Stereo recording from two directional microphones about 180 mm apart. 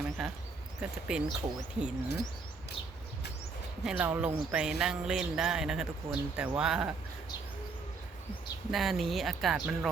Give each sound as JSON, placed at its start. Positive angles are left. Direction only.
{"t": 0.2, "sound": "a sound", "side_deg": 0}
{"t": 0.8, "sound": "speech", "side_deg": -5}
{"t": 3.8, "sound": "speech", "side_deg": -5}
{"t": 8.7, "sound": "speech", "side_deg": 0}